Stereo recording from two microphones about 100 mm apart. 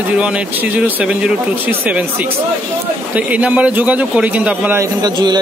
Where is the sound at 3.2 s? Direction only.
15° right (ahead or behind).